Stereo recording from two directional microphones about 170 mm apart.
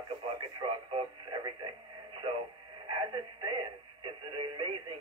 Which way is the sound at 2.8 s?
25° right (ahead or behind).